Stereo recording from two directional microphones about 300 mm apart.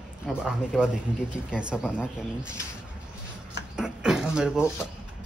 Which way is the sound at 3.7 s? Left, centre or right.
Centre.